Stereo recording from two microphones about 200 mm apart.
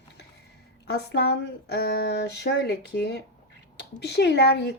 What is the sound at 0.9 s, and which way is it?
A woman's voice, 55° left (ahead or behind).